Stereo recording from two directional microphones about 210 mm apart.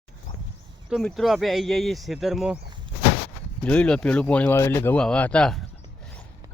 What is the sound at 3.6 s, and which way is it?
Speech, 5° left (ahead or behind).